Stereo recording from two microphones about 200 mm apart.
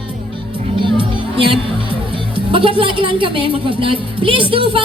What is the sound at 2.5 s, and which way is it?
Speech, 25° right (ahead or behind).